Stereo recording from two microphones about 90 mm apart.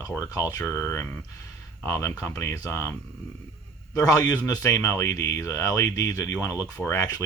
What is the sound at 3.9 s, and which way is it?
A man's voice, 45° left (ahead or behind).